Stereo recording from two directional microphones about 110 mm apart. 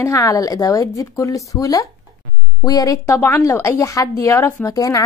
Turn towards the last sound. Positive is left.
turn(degrees=30)  # may be behind; listen again after turning